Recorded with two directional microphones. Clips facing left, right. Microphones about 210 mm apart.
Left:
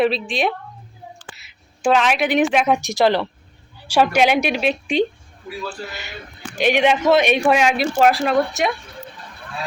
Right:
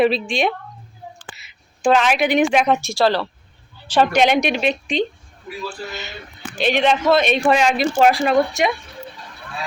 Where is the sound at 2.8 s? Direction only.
20° left (ahead or behind).